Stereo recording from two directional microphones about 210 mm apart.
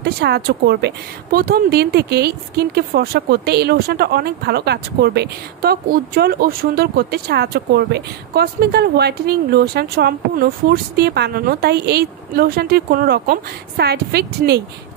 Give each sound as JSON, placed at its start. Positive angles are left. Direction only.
{"t": 0.0, "sound": "speech", "side_deg": -50}